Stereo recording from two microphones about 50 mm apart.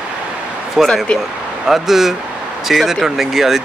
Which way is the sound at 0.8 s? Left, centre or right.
Centre.